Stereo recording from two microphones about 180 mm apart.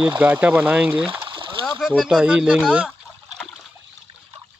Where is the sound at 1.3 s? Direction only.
30° right (ahead or behind).